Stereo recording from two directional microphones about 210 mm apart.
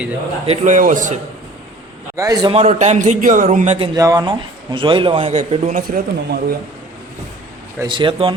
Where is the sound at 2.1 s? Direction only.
15° right (ahead or behind).